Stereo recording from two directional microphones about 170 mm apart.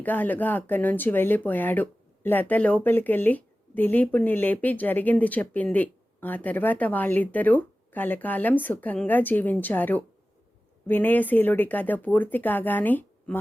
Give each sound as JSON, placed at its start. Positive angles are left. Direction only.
{"t": 0.0, "sound": "speech", "side_deg": 10}